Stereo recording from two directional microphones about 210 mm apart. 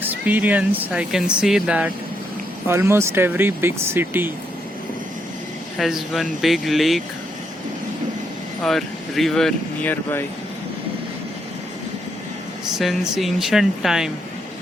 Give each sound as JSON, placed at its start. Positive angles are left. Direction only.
{"t": 0.0, "sound": "speech", "side_deg": -10}
{"t": 5.7, "sound": "speech", "side_deg": 0}
{"t": 8.6, "sound": "speech", "side_deg": 0}
{"t": 12.8, "sound": "speech", "side_deg": 0}